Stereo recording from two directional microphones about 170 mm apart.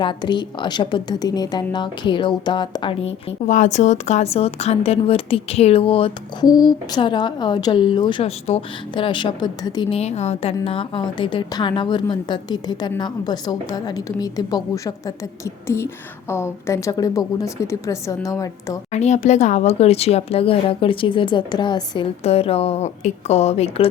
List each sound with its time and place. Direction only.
0.0 s a woman's voice: 25° left (ahead or behind)
10.0 s a woman's voice: 40° left (ahead or behind); by 18.8 s 20° left (ahead or behind)
18.9 s speech: 40° left (ahead or behind)